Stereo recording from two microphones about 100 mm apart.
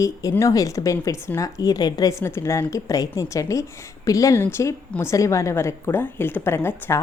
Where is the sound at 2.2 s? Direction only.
30° left (ahead or behind).